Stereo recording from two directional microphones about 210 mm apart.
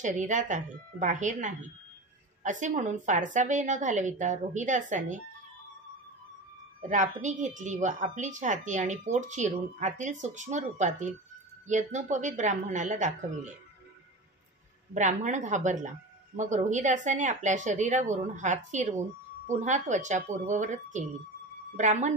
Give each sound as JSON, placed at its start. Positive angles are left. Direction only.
{"t": 0.0, "sound": "a woman's voice", "side_deg": -35}
{"t": 6.8, "sound": "a woman's voice", "side_deg": -35}
{"t": 15.0, "sound": "a woman's voice", "side_deg": -35}